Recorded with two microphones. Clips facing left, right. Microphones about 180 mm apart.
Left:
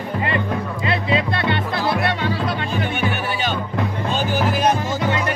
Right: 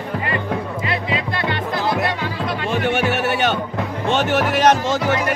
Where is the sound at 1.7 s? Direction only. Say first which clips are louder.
Right 3 dB; 20° right (ahead or behind).